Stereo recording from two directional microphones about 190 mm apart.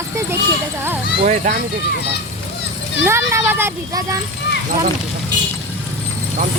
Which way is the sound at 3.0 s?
10° right (ahead or behind).